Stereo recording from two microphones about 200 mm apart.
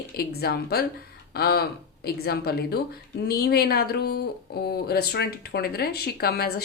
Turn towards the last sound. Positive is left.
turn(degrees=50)  # may be behind; listen again after turning